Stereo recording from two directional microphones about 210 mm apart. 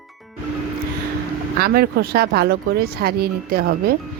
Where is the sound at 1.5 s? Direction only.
50° right (ahead or behind).